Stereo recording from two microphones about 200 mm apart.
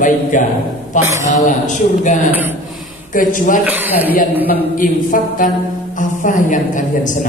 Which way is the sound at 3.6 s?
10° right (ahead or behind).